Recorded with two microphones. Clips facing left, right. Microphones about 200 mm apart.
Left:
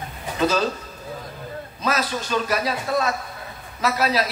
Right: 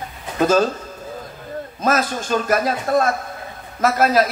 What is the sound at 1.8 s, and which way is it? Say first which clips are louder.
Speech: right 4 dB; 50° right (ahead or behind).